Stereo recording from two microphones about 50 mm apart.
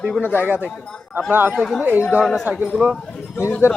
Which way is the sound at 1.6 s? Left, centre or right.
Centre.